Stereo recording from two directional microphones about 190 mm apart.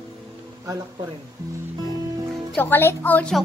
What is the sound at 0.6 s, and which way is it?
Speech, 20° right (ahead or behind).